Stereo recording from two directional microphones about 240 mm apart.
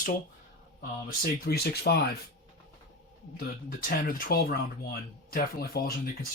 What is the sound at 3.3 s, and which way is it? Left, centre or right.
Speech, left.